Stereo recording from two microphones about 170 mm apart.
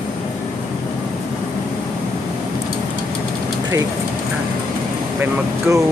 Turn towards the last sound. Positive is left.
turn(degrees=-15)  # may be behind; listen again after turning